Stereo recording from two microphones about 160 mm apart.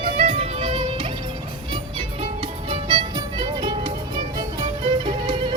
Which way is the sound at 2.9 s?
30° right (ahead or behind).